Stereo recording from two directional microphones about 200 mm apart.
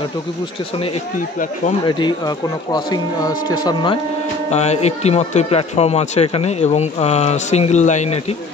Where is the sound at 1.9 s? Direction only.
20° left (ahead or behind).